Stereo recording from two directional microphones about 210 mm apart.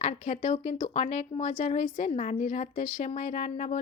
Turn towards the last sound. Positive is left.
turn(degrees=35)  # may be behind; listen again after turning